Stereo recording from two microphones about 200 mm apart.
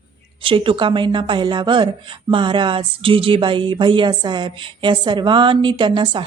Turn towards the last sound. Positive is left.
turn(degrees=-25)  # may be behind; listen again after turning